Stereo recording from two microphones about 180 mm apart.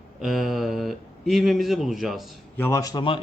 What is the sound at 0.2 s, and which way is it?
Speech, centre (ahead or behind).